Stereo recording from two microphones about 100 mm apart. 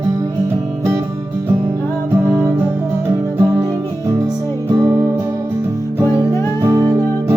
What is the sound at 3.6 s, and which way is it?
Music, 35° right (ahead or behind).